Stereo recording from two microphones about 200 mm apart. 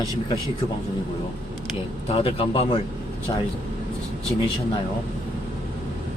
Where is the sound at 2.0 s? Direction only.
30° left (ahead or behind).